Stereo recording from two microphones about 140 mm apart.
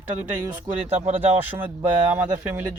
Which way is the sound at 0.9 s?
55° right (ahead or behind).